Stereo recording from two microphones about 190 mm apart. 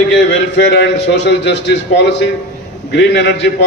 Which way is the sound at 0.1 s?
75° left (ahead or behind).